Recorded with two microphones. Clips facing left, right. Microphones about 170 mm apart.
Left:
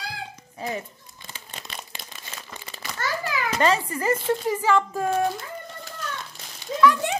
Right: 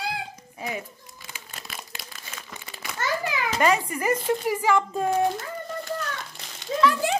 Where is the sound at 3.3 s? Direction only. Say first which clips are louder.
Left 1 dB; 15° right (ahead or behind).